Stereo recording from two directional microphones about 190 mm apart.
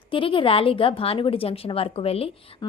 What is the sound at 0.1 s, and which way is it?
A woman's voice, 25° left (ahead or behind).